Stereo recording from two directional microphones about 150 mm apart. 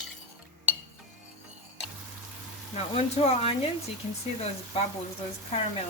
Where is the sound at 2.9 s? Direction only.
45° left (ahead or behind).